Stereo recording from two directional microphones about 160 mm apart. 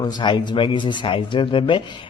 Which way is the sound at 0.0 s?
30° left (ahead or behind).